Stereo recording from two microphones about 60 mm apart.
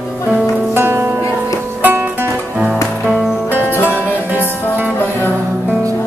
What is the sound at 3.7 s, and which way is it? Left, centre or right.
Music, left.